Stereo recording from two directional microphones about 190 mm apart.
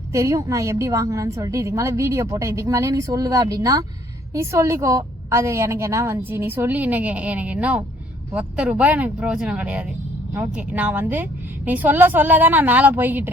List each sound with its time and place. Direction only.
0.1 s a woman's voice: 15° right (ahead or behind)